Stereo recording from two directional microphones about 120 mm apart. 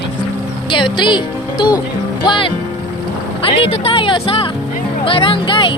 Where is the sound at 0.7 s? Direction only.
40° left (ahead or behind).